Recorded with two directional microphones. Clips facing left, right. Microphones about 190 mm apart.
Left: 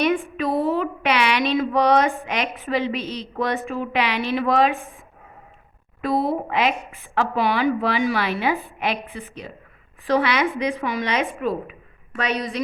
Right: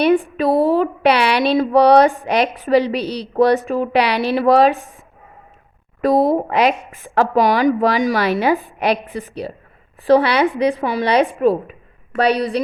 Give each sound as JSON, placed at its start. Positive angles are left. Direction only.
{"t": 0.0, "sound": "speech", "side_deg": -35}
{"t": 6.0, "sound": "speech", "side_deg": -40}